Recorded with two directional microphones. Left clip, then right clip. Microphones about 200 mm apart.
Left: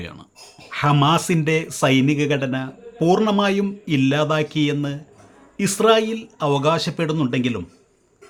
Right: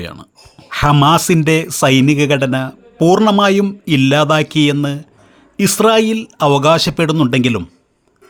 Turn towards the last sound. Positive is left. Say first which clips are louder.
# right 8 dB
turn(degrees=-40)  # may be behind; listen again after turning